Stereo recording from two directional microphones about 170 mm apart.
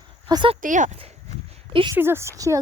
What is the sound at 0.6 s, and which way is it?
Speech, 50° right (ahead or behind).